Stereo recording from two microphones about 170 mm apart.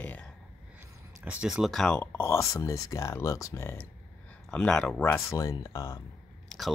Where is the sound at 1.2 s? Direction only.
5° right (ahead or behind); by 3.8 s 15° left (ahead or behind).